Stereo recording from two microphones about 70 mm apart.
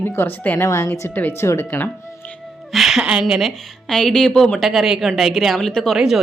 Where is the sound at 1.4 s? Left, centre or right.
Left.